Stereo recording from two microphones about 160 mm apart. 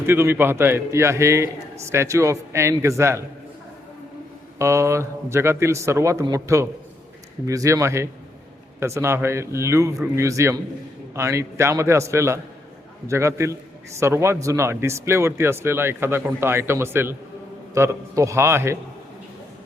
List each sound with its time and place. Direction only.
0.0 s speech: 15° right (ahead or behind)
4.5 s speech: 15° right (ahead or behind)